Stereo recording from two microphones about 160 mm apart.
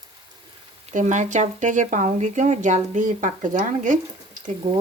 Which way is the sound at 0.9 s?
50° right (ahead or behind).